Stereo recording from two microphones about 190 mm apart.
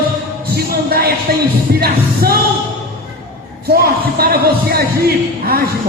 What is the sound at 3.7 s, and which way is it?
Music, 55° right (ahead or behind).